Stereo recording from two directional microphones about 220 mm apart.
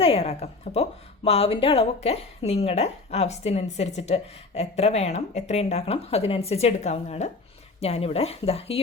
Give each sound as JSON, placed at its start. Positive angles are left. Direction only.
{"t": 0.0, "sound": "speech", "side_deg": 25}